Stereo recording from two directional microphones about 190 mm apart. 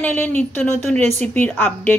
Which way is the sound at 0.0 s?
10° left (ahead or behind).